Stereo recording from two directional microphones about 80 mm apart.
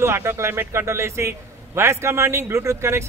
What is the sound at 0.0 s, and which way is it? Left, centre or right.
A man's voice, right.